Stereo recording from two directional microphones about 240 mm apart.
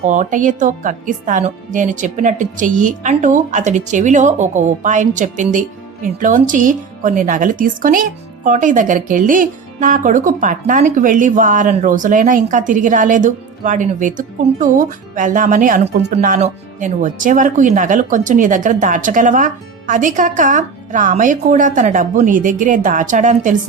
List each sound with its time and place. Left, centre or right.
0.0 s speech: right
16.1 s speech: right